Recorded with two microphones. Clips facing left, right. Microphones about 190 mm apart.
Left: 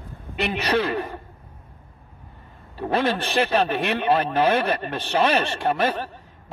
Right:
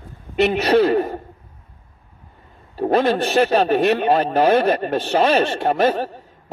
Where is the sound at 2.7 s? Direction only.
45° right (ahead or behind).